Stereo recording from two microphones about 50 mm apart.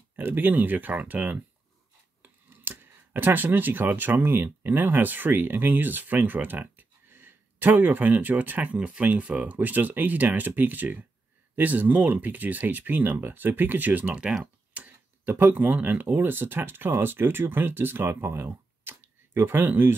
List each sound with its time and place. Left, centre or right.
0.1 s speech: right
8.7 s speech: centre; by 20.0 s right